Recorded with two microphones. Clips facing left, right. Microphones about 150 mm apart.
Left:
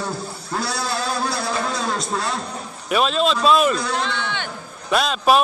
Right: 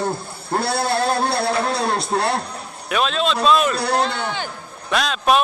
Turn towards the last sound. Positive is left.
turn(degrees=0)  # may be behind; listen again after turning